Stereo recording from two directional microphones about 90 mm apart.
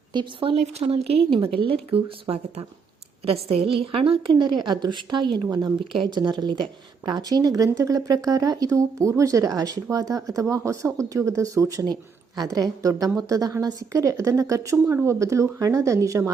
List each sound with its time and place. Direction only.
0.1 s a woman's voice: 65° right (ahead or behind); by 16.3 s 40° right (ahead or behind)